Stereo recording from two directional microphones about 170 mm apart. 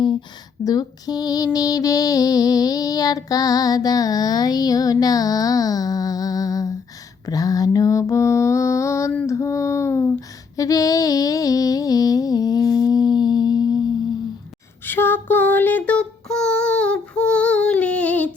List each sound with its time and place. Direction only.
0.6 s music: 20° left (ahead or behind)
7.3 s mantra: 20° left (ahead or behind)
14.8 s a sound: 10° left (ahead or behind)